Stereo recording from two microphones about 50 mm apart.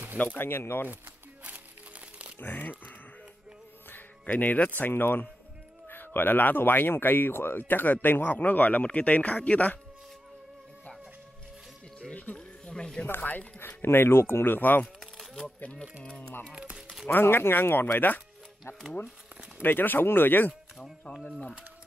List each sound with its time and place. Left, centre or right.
0.4 s speech: left
2.3 s speech: left
3.9 s speech: left
12.1 s speech: left
12.4 s music: centre
13.2 s speech: left
13.6 s speech: left
16.7 s music: centre
17.1 s speech: left
19.6 s speech: left
21.2 s speech: centre